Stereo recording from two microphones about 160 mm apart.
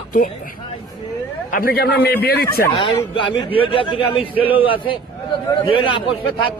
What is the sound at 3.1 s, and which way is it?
A man's voice, 35° left (ahead or behind).